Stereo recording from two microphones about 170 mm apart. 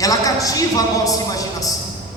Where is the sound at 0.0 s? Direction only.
20° left (ahead or behind).